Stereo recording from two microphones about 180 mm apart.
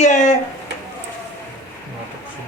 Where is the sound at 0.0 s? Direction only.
40° left (ahead or behind).